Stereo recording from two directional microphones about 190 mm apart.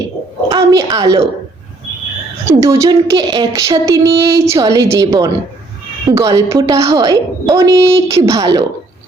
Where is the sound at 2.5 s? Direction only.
15° right (ahead or behind).